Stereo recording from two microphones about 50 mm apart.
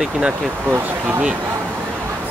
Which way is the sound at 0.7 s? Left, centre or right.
Right.